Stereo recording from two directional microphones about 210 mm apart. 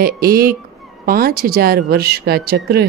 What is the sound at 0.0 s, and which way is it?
Speech, 45° right (ahead or behind).